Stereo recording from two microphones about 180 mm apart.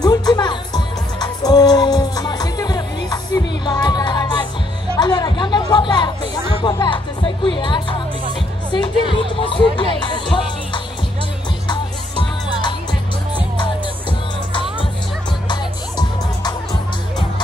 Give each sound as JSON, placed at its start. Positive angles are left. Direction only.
{"t": 0.0, "sound": "music", "side_deg": 20}
{"t": 11.6, "sound": "music", "side_deg": 25}
{"t": 15.4, "sound": "music", "side_deg": 25}